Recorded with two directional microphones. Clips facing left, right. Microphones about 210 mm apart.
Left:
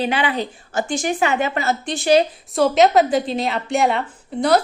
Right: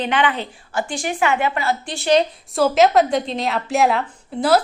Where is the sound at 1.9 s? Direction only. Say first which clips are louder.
Left 2 dB; 10° left (ahead or behind).